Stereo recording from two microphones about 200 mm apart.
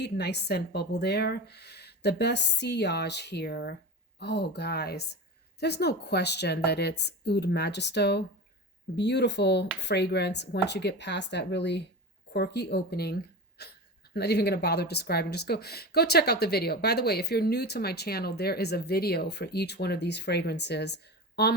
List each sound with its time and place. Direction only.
0.0 s a woman's voice: 55° left (ahead or behind)